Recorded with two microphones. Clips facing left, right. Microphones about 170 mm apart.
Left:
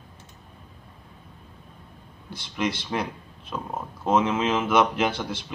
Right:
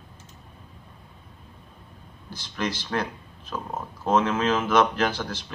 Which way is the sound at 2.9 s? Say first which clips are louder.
Even; 15° left (ahead or behind).